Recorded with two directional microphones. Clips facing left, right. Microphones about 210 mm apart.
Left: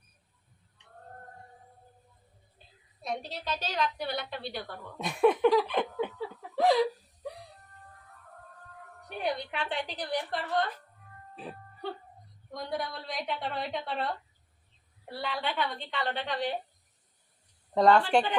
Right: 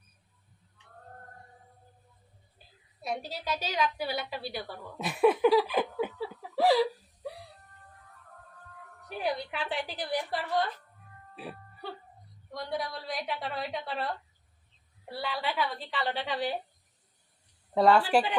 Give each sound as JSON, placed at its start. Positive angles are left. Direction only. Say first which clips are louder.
{"t": 3.0, "sound": "a woman's voice", "louder": "right 1 dB", "side_deg": -5}
{"t": 9.0, "sound": "a woman's voice", "louder": "even", "side_deg": 0}
{"t": 11.3, "sound": "music", "louder": "even", "side_deg": -5}
{"t": 12.5, "sound": "a woman's voice", "louder": "even", "side_deg": 0}
{"t": 15.1, "sound": "a woman's voice", "louder": "even", "side_deg": 0}
{"t": 17.7, "sound": "a woman's voice", "louder": "even", "side_deg": -5}